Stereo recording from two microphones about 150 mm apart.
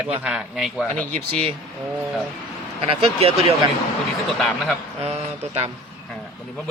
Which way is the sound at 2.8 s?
40° right (ahead or behind).